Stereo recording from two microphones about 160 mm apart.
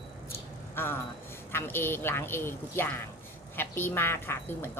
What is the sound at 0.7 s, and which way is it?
A woman's voice, 15° left (ahead or behind).